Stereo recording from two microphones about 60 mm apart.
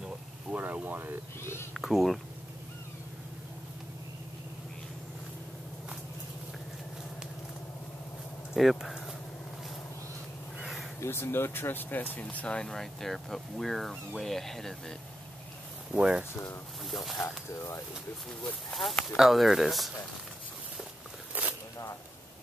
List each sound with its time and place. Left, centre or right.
0.5 s a sound: right
1.4 s a sound: left
1.7 s speech: centre
8.5 s speech: centre
10.6 s crow: centre
11.0 s speech: left
12.5 s speech: centre
15.9 s speech: centre
16.9 s speech: centre
18.7 s speech: centre
21.4 s a sound: right